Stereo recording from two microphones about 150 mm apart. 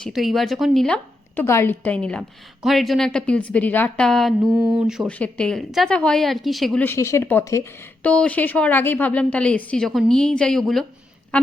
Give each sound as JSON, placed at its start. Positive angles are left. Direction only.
{"t": 0.0, "sound": "a woman's voice", "side_deg": 0}
{"t": 1.5, "sound": "a woman's voice", "side_deg": 15}
{"t": 4.4, "sound": "mantra", "side_deg": -15}
{"t": 5.0, "sound": "a woman's voice", "side_deg": 10}
{"t": 6.8, "sound": "a woman's voice", "side_deg": 20}